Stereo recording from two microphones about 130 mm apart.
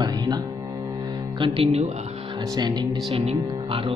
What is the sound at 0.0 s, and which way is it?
Music, 30° right (ahead or behind).